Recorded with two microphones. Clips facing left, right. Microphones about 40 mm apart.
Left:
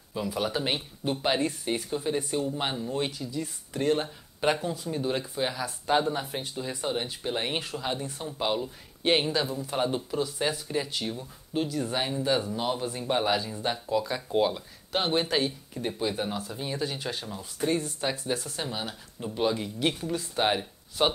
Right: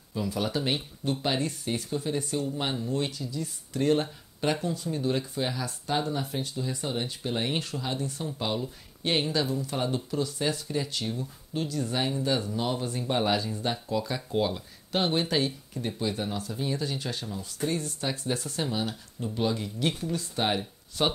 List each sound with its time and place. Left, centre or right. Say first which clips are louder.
0.1 s speech: even; centre
3.8 s speech: right 1 dB; centre
5.9 s speech: left 4 dB; left
18.2 s speech: right 1 dB; centre